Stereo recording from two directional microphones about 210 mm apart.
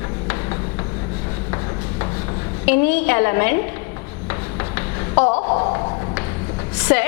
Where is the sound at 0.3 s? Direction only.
15° left (ahead or behind).